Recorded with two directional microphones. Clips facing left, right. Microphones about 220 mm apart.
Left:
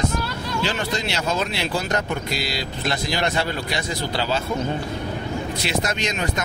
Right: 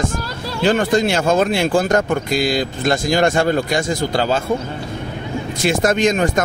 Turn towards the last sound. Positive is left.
turn(degrees=-50)  # may be behind; listen again after turning